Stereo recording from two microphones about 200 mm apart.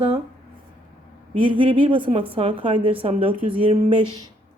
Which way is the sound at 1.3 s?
25° right (ahead or behind).